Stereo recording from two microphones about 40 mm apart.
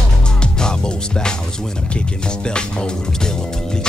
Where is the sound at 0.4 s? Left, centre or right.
Left.